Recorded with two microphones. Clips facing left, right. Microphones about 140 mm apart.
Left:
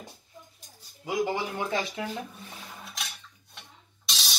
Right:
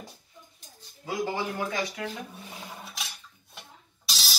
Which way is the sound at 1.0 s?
15° left (ahead or behind).